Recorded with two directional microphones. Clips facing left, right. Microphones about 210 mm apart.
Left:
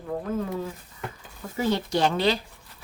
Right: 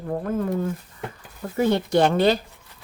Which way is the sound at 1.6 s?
55° right (ahead or behind).